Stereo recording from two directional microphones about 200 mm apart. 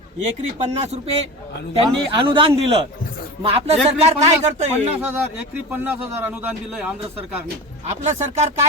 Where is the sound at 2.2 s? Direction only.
25° right (ahead or behind).